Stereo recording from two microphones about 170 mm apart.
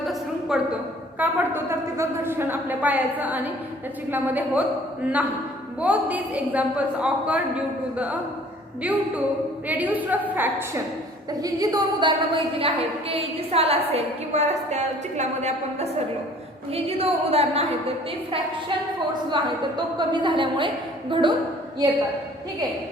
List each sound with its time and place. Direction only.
0.0 s a sound: centre (ahead or behind)
1.2 s a woman's voice: 10° right (ahead or behind)
5.8 s a woman's voice: 10° right (ahead or behind)
11.3 s a woman's voice: 20° right (ahead or behind); by 17.7 s 35° right (ahead or behind)
19.3 s a woman's voice: 25° right (ahead or behind)